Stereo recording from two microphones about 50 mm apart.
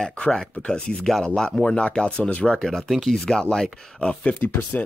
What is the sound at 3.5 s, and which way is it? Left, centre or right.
Speech, centre.